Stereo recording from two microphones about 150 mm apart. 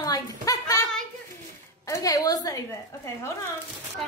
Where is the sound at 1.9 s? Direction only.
25° left (ahead or behind).